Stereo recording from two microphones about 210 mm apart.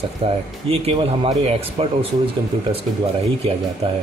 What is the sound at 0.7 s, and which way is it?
Speech, 25° right (ahead or behind).